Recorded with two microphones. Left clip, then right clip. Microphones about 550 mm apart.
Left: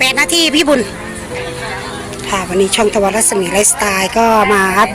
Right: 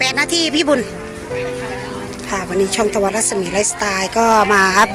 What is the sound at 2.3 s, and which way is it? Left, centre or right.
Speech, right.